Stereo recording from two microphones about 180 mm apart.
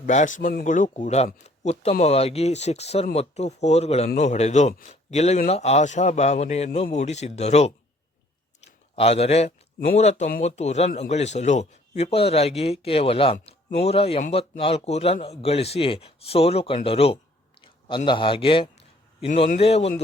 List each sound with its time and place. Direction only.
0.0 s speech: 45° left (ahead or behind)
9.0 s speech: 35° left (ahead or behind)
17.6 s a sound: 25° left (ahead or behind)
19.3 s speech: 40° left (ahead or behind)